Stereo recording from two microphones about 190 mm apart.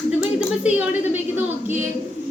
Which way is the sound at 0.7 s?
10° right (ahead or behind).